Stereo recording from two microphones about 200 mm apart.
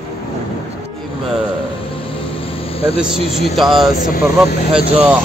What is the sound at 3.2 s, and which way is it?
Speech, 30° left (ahead or behind).